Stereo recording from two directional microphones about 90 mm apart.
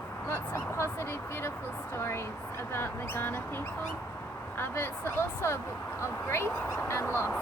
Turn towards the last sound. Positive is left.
turn(degrees=25)  # may be behind; listen again after turning